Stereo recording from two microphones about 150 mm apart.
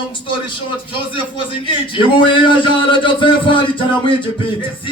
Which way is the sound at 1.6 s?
35° left (ahead or behind).